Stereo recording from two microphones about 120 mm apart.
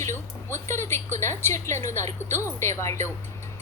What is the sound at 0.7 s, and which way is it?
A woman's voice, 20° left (ahead or behind).